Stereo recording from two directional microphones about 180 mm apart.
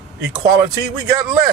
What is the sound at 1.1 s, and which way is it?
Speech, 20° right (ahead or behind).